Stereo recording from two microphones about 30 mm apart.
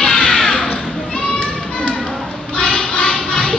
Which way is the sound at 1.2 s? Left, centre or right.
Left.